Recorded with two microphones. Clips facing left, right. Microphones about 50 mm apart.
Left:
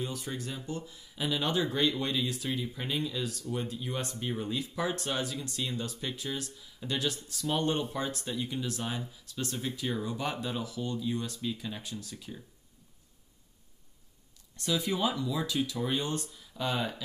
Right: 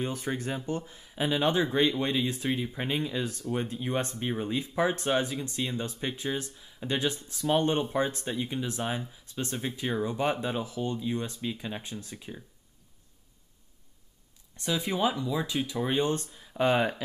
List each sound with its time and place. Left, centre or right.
0.0 s speech: right
14.6 s speech: right